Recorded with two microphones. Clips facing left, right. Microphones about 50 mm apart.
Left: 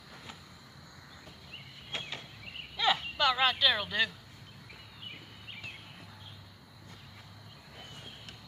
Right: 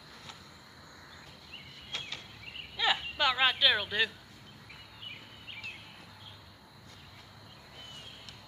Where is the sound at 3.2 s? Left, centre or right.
Centre.